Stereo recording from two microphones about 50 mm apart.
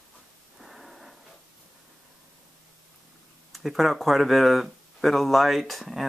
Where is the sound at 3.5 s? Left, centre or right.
Centre.